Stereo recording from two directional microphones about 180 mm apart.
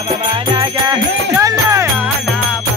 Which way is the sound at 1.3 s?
15° right (ahead or behind).